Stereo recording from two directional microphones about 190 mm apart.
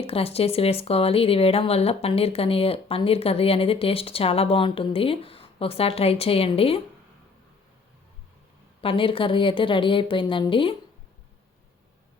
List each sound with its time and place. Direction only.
0.0 s speech: 30° left (ahead or behind)
8.8 s speech: 30° left (ahead or behind)